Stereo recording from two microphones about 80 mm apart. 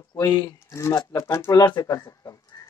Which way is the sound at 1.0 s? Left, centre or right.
Left.